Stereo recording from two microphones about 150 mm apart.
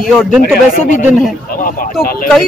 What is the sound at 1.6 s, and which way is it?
Speech, 65° left (ahead or behind).